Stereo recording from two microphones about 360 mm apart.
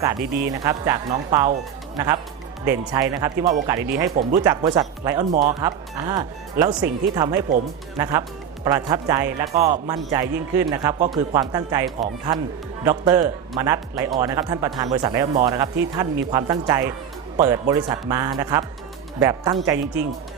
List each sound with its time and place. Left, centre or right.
0.0 s a man's voice: centre
2.6 s a man's voice: centre